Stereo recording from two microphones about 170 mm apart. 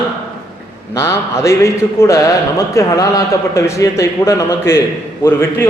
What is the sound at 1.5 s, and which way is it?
A man's voice, 15° left (ahead or behind).